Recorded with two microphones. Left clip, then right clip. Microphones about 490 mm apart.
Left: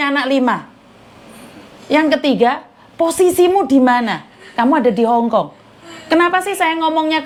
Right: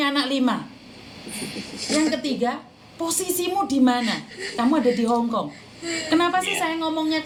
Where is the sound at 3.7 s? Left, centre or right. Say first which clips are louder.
Left 8 dB; left.